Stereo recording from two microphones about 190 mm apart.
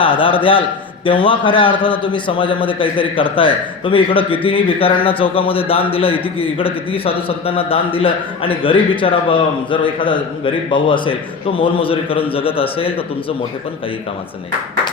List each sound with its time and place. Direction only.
0.0 s a man's voice: 25° left (ahead or behind)